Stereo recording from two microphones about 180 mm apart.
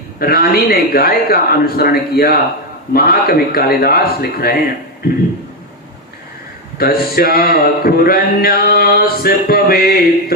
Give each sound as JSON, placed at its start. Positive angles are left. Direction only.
{"t": 0.2, "sound": "speech", "side_deg": 60}
{"t": 6.7, "sound": "speech", "side_deg": 60}